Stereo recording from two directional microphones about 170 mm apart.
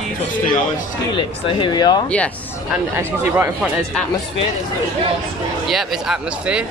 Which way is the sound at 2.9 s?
15° right (ahead or behind).